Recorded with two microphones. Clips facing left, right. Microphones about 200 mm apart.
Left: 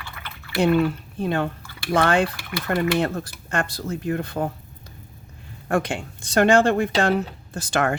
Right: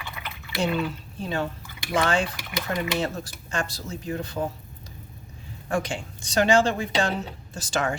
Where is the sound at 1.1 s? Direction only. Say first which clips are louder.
Left 4 dB; 60° left (ahead or behind).